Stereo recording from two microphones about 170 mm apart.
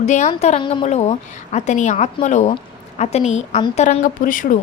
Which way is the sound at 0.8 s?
40° left (ahead or behind).